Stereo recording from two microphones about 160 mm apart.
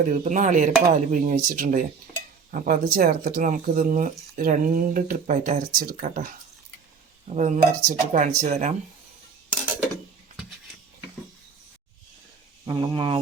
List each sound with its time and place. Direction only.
0.0 s speech: 50° right (ahead or behind)
7.3 s speech: 50° right (ahead or behind)
12.6 s speech: 25° right (ahead or behind)